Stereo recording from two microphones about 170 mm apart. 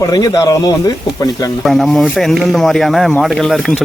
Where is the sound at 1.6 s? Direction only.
Centre (ahead or behind).